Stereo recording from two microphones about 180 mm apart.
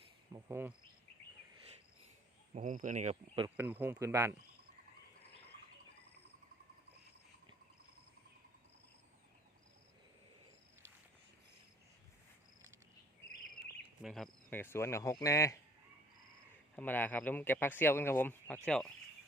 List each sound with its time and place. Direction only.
0.3 s speech: 15° right (ahead or behind)
2.6 s speech: 45° right (ahead or behind)
3.4 s speech: 10° right (ahead or behind)
14.0 s speech: centre (ahead or behind)
14.5 s speech: 10° left (ahead or behind)
16.7 s speech: 10° left (ahead or behind)